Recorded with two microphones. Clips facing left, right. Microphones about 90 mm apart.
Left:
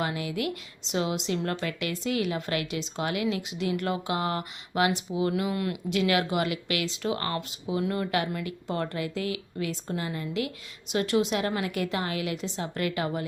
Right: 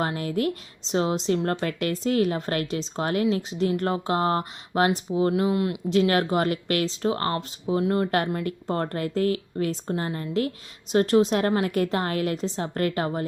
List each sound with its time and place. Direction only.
0.0 s speech: 40° right (ahead or behind)
5.3 s speech: 25° right (ahead or behind)